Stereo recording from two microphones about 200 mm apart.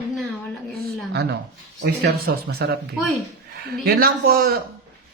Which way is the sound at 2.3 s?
55° right (ahead or behind).